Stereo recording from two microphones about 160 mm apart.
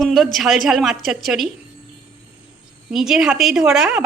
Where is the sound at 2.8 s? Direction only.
5° right (ahead or behind).